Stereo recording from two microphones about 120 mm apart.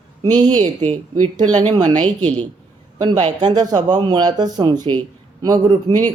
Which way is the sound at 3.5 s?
35° right (ahead or behind).